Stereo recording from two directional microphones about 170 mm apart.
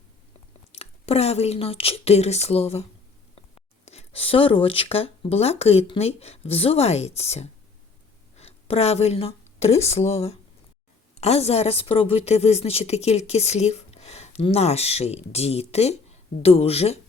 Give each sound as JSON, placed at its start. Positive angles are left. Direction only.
{"t": 0.7, "sound": "a woman's voice", "side_deg": 40}